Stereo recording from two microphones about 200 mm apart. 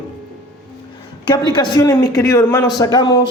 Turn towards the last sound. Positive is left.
turn(degrees=20)  # may be behind; listen again after turning